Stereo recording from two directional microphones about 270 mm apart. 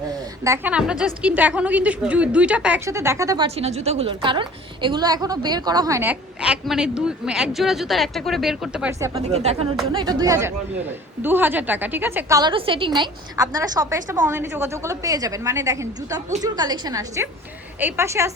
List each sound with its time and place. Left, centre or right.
0.1 s a woman's voice: centre
9.3 s a woman's voice: right